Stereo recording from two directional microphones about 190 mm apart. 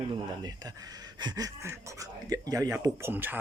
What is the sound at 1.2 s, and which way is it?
Speech, 20° right (ahead or behind).